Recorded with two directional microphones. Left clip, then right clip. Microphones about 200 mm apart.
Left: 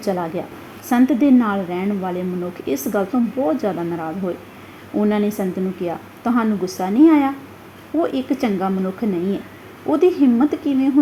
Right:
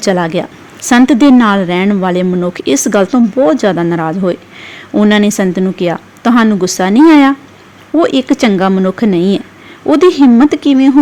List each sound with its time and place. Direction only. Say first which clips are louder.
0.0 s a woman's voice: right 10 dB; 35° right (ahead or behind)
4.9 s a woman's voice: right 10 dB; 35° right (ahead or behind)
8.4 s a woman's voice: right 11 dB; 40° right (ahead or behind)